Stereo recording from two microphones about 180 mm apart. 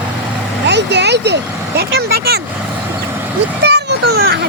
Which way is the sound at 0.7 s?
70° right (ahead or behind).